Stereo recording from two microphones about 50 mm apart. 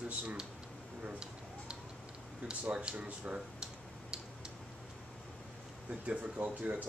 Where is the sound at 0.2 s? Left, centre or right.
Right.